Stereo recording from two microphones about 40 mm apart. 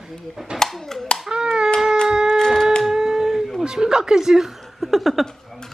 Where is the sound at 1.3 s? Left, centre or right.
Right.